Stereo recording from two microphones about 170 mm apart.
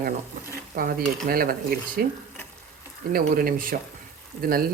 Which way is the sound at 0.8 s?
60° right (ahead or behind).